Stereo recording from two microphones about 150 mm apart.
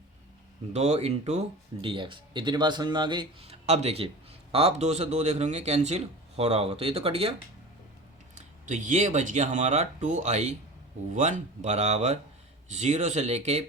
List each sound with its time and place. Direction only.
0.7 s speech: 45° right (ahead or behind); by 3.5 s 30° right (ahead or behind)
3.5 s speech: 45° right (ahead or behind)
8.4 s speech: 55° right (ahead or behind)